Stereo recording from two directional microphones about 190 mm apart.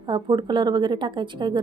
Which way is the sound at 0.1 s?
25° right (ahead or behind).